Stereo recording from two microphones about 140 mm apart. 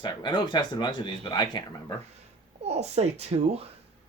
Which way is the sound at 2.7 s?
50° right (ahead or behind).